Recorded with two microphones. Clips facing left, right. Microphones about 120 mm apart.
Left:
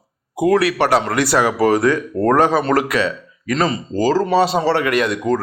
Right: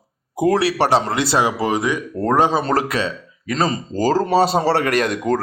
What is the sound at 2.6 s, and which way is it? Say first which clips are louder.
Speech: left 3 dB; 30° right (ahead or behind).